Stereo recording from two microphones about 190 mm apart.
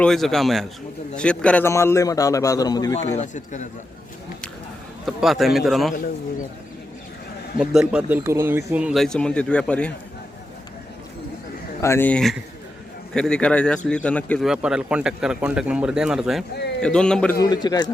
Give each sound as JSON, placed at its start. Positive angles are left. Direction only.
{"t": 0.0, "sound": "a man's voice", "side_deg": 0}
{"t": 3.2, "sound": "speech", "side_deg": 40}
{"t": 5.0, "sound": "a man's voice", "side_deg": 0}
{"t": 7.6, "sound": "a man's voice", "side_deg": -5}
{"t": 11.8, "sound": "a man's voice", "side_deg": 10}
{"t": 17.3, "sound": "a man's voice", "side_deg": 20}